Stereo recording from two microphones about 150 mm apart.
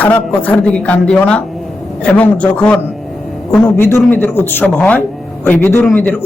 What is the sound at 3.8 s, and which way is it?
Speech, 15° left (ahead or behind).